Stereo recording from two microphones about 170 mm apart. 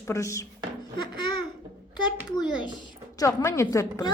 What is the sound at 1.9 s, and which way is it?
A woman's voice, 25° left (ahead or behind).